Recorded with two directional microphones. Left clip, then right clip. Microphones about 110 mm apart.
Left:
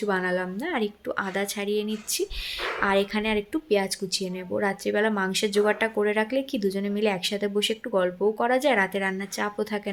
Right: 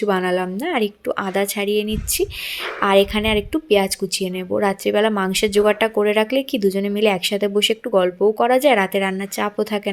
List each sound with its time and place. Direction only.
0.0 s a woman's voice: 30° right (ahead or behind)